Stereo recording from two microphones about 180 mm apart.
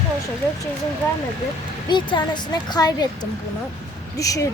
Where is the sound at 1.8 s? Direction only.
25° left (ahead or behind).